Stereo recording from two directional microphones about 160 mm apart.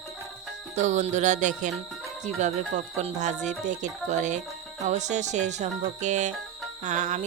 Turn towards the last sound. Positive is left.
turn(degrees=-50)  # may be behind; listen again after turning